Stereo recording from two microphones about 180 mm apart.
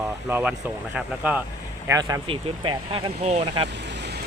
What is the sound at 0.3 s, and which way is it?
Speech, 10° right (ahead or behind).